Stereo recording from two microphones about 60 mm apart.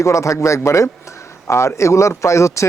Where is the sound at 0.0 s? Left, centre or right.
Left.